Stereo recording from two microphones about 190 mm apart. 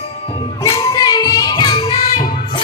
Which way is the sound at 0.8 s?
20° left (ahead or behind).